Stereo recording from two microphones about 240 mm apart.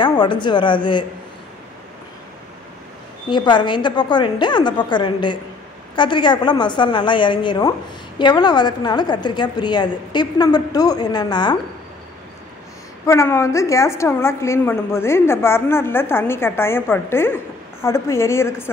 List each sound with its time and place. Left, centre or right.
0.0 s a woman's voice: centre
3.3 s a woman's voice: centre
13.0 s a woman's voice: centre